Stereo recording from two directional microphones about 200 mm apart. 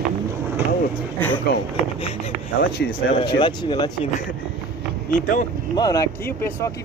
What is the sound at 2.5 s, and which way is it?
Speech, 55° left (ahead or behind).